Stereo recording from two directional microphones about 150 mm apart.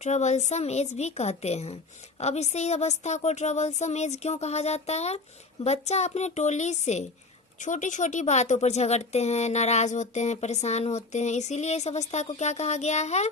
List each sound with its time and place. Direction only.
0.0 s speech: 50° left (ahead or behind)